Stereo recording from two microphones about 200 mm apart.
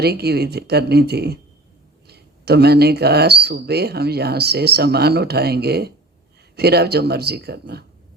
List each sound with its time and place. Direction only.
0.0 s speech: 55° right (ahead or behind)